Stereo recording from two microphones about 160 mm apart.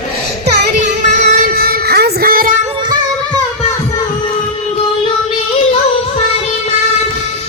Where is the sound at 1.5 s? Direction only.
70° right (ahead or behind).